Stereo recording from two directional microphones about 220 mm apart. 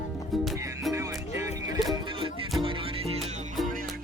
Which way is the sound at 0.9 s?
15° right (ahead or behind).